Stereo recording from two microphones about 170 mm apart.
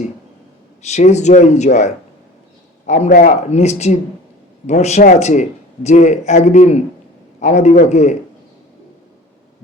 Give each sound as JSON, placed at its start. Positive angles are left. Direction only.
{"t": 0.8, "sound": "a man's voice", "side_deg": 40}